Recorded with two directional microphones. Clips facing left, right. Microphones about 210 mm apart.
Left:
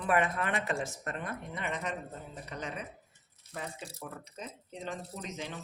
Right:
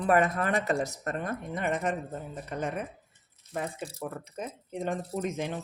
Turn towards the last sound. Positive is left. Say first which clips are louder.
# right 9 dB
turn(degrees=-55)  # may be behind; listen again after turning